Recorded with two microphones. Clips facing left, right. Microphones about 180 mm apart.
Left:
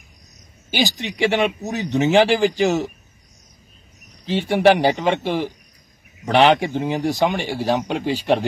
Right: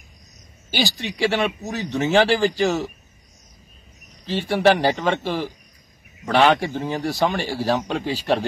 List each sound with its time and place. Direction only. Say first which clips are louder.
0.7 s speech: left 2 dB; 15° left (ahead or behind)
4.3 s speech: left 2 dB; 15° left (ahead or behind)